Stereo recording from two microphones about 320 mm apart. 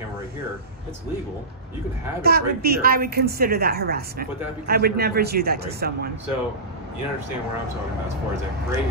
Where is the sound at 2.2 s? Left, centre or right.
Right.